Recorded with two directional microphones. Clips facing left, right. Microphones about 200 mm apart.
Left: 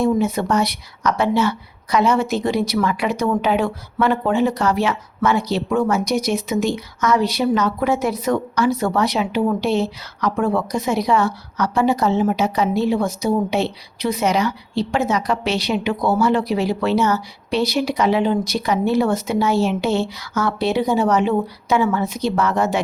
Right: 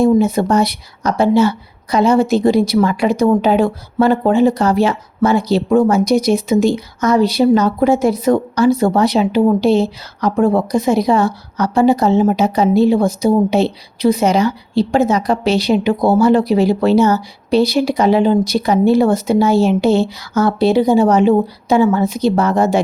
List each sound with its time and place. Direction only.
0.2 s speech: 30° right (ahead or behind)